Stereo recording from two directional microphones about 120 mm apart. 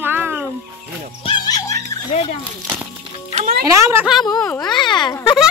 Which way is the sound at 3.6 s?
25° right (ahead or behind).